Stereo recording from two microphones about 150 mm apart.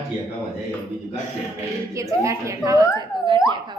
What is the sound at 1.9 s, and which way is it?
Speech, 20° right (ahead or behind).